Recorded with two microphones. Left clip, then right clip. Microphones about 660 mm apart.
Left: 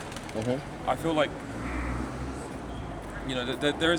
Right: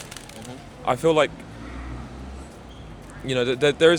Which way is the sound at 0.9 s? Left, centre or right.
Right.